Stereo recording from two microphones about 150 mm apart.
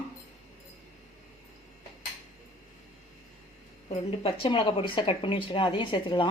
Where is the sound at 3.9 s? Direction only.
40° left (ahead or behind).